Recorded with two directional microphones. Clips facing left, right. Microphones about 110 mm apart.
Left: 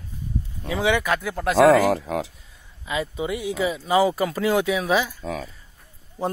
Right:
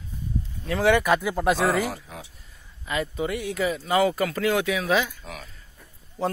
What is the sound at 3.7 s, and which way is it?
Speech, 15° left (ahead or behind).